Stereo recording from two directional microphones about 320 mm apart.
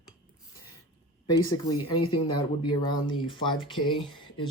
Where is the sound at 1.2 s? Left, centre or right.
Centre.